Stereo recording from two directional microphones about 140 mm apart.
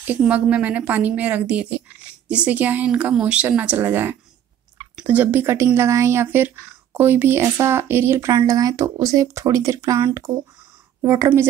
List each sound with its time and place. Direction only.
0.0 s speech: 10° right (ahead or behind)